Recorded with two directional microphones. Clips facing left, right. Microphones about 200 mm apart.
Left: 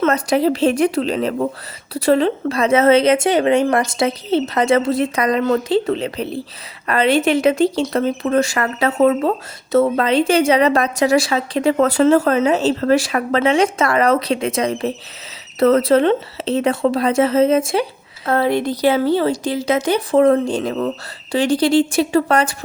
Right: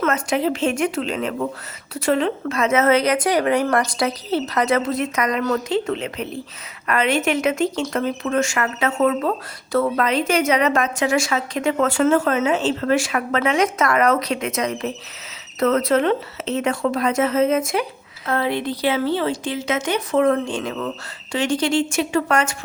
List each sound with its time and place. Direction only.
0.0 s a woman's voice: 35° left (ahead or behind)
18.3 s a woman's voice: 40° left (ahead or behind)